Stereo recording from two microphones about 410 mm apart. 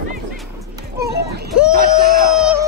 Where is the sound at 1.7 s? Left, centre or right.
Right.